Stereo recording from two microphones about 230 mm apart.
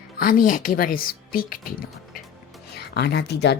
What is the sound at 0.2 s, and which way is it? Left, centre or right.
Speech, left.